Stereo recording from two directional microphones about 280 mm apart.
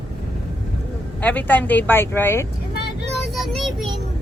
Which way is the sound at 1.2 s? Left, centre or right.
Centre.